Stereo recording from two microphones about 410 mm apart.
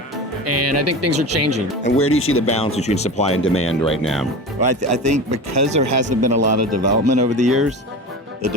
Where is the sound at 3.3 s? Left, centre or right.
Left.